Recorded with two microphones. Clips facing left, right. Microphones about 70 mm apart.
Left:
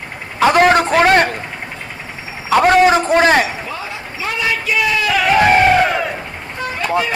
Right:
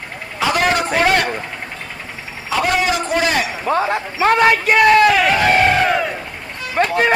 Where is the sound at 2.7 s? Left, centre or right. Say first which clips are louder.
Left 7 dB; left.